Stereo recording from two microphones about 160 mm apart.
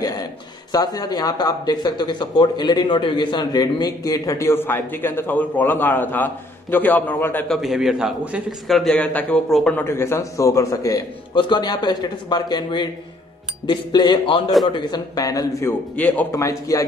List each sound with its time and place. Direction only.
0.7 s speech: 25° left (ahead or behind)
7.4 s a man's voice: centre (ahead or behind); by 15.7 s 20° left (ahead or behind)
16.0 s a man's voice: 10° left (ahead or behind)
16.3 s speech: 20° left (ahead or behind)